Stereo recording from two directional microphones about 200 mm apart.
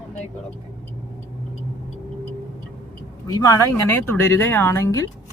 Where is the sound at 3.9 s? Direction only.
10° left (ahead or behind).